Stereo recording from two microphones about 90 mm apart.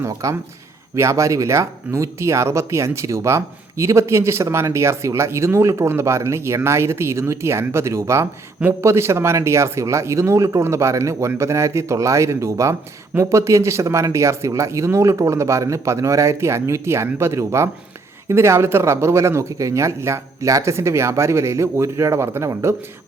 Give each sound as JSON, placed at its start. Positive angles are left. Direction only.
{"t": 0.0, "sound": "speech", "side_deg": -35}